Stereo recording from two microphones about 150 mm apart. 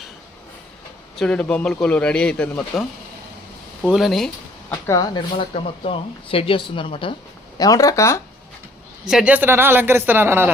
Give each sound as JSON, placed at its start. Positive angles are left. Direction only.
{"t": 1.1, "sound": "a man's voice", "side_deg": 5}
{"t": 3.9, "sound": "speech", "side_deg": 0}
{"t": 4.7, "sound": "speech", "side_deg": 25}
{"t": 7.6, "sound": "speech", "side_deg": 25}
{"t": 9.0, "sound": "speech", "side_deg": -5}